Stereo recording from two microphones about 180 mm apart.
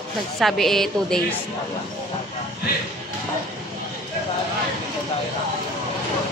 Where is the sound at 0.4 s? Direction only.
Centre (ahead or behind).